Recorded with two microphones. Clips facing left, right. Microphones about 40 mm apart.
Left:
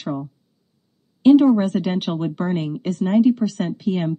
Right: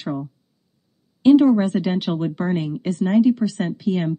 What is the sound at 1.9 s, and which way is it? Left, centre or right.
Speech, centre.